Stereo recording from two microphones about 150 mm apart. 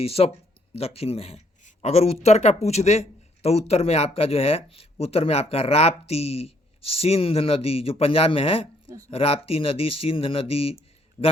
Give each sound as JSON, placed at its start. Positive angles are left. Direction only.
{"t": 0.0, "sound": "speech", "side_deg": 40}
{"t": 1.6, "sound": "a sound", "side_deg": 45}
{"t": 2.2, "sound": "speech", "side_deg": 45}
{"t": 11.2, "sound": "speech", "side_deg": 25}